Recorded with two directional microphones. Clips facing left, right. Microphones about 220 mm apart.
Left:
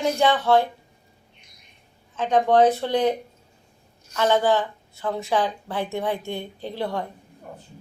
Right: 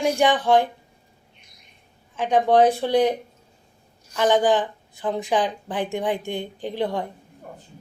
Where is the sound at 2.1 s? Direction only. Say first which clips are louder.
Right 1 dB; 15° right (ahead or behind).